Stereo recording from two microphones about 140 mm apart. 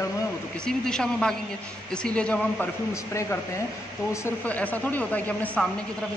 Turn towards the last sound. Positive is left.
turn(degrees=10)  # may be behind; listen again after turning